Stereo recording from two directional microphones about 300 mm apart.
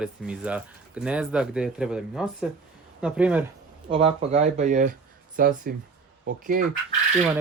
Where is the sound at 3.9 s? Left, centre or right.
Centre.